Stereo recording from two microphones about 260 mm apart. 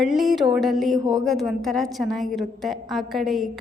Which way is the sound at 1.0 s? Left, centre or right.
Centre.